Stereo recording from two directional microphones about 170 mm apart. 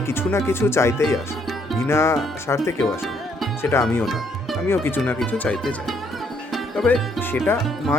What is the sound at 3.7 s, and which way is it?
Speech, 15° left (ahead or behind).